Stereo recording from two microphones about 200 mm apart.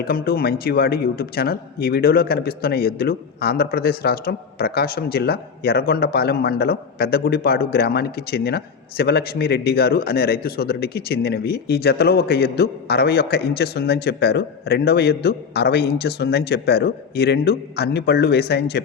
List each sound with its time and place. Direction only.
0.0 s speech: 50° left (ahead or behind)